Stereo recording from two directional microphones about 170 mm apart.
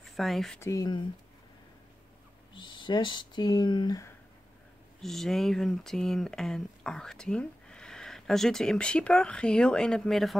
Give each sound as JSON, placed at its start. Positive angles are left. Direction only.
{"t": 0.0, "sound": "speech", "side_deg": 0}
{"t": 0.6, "sound": "speech", "side_deg": 20}
{"t": 2.5, "sound": "speech", "side_deg": 25}
{"t": 5.0, "sound": "speech", "side_deg": 0}